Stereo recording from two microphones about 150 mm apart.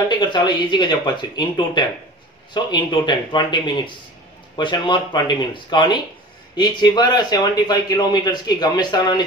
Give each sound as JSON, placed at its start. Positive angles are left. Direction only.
{"t": 0.1, "sound": "a man's voice", "side_deg": 30}